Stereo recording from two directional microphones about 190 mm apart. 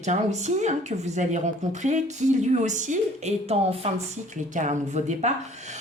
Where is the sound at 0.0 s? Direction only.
40° right (ahead or behind).